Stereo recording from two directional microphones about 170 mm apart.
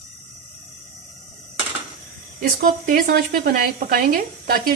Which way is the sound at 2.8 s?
55° right (ahead or behind).